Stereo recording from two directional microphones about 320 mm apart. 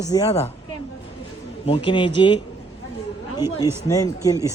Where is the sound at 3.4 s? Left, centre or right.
Centre.